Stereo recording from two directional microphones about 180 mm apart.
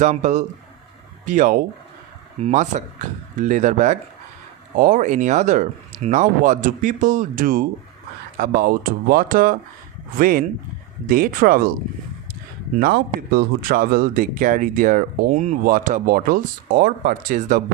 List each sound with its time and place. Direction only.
0.0 s speech: 40° right (ahead or behind)
12.8 s speech: 55° right (ahead or behind)